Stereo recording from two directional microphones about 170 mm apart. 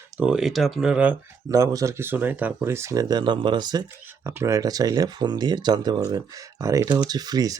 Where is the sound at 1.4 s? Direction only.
20° right (ahead or behind).